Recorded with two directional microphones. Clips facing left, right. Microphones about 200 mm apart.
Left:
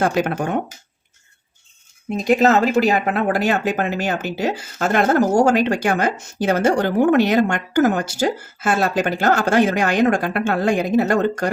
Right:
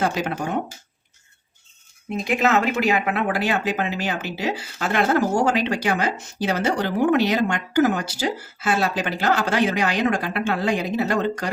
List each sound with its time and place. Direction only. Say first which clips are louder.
0.0 s speech: left 4 dB; 50° left (ahead or behind)
2.2 s speech: left 5 dB; 40° left (ahead or behind)